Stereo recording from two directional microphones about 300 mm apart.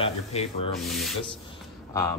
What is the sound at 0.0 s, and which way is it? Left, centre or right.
Rub, centre.